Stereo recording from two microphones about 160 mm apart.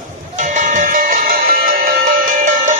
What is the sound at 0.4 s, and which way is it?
Music, 50° right (ahead or behind).